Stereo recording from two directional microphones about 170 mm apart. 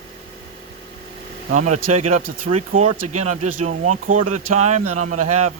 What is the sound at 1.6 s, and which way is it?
Speech, 45° right (ahead or behind).